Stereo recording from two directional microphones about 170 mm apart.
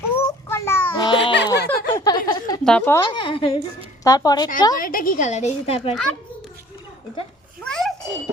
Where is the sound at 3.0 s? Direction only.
30° left (ahead or behind).